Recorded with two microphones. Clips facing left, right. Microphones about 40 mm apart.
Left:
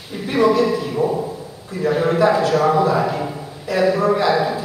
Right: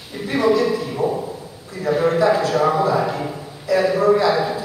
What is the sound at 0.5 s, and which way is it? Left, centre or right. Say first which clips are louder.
Speech: left 1 dB; left.